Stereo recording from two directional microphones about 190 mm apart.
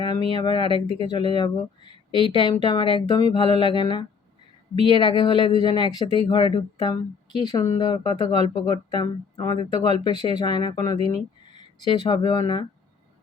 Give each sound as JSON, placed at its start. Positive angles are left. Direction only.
{"t": 0.0, "sound": "speech", "side_deg": 25}